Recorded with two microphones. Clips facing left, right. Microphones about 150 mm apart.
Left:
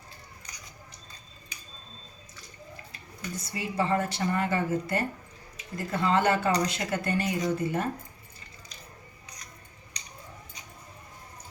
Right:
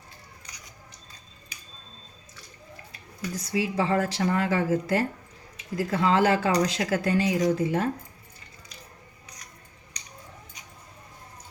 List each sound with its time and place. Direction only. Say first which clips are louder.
3.3 s speech: right 4 dB; 90° right